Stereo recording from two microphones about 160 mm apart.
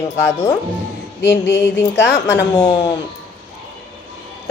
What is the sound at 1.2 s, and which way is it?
Speech, 90° left.